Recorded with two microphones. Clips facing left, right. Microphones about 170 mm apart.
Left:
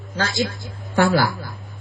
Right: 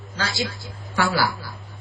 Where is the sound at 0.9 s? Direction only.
50° left (ahead or behind).